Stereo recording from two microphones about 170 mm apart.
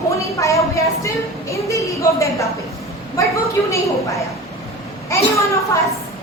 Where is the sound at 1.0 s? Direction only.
20° left (ahead or behind).